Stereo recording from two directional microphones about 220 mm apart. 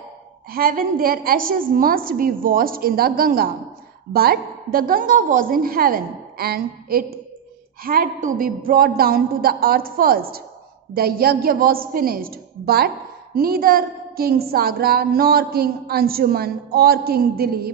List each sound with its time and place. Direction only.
0.5 s a woman's voice: 40° right (ahead or behind)